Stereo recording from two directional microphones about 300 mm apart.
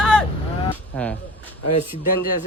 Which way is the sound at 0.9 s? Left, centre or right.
Centre.